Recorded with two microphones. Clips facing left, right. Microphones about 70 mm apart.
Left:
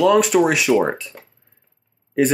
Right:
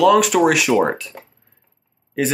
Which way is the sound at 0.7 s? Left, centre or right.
Centre.